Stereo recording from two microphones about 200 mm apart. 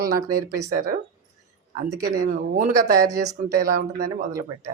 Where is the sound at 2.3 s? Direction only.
50° right (ahead or behind).